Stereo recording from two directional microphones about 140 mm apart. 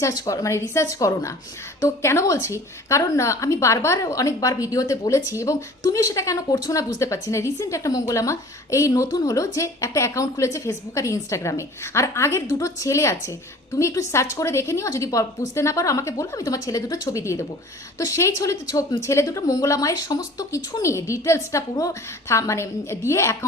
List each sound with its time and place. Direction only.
0.0 s a woman's voice: 25° left (ahead or behind)